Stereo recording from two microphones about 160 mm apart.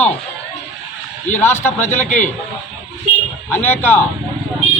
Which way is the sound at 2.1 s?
50° left (ahead or behind).